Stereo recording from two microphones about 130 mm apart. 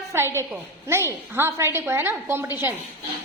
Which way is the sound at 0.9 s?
20° right (ahead or behind).